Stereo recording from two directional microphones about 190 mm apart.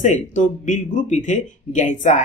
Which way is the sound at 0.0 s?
40° left (ahead or behind).